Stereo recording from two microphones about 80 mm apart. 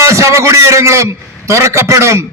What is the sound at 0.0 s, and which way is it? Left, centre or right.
A man's voice, right.